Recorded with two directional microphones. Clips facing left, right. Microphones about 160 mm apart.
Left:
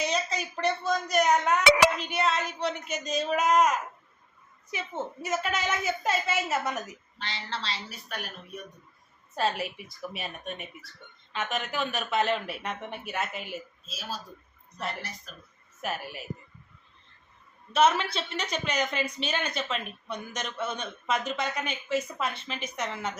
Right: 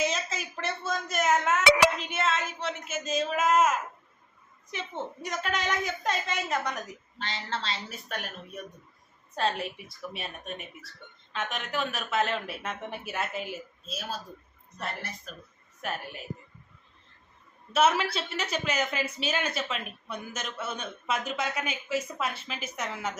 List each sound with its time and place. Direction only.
0.0 s a sound: centre (ahead or behind)
4.7 s speech: 5° left (ahead or behind)
7.2 s a woman's voice: 45° right (ahead or behind)
9.3 s speech: 5° left (ahead or behind)
13.8 s speech: 55° right (ahead or behind)
15.8 s speech: 5° left (ahead or behind)
17.7 s a woman's voice: 5° right (ahead or behind)